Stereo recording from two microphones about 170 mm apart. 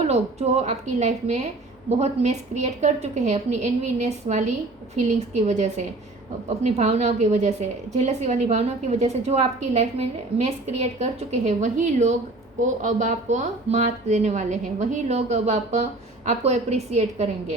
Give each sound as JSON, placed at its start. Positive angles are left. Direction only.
{"t": 0.1, "sound": "a woman's voice", "side_deg": -40}